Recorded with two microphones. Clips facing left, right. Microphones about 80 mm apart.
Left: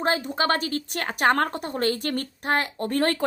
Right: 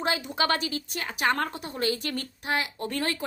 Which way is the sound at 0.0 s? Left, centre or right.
Left.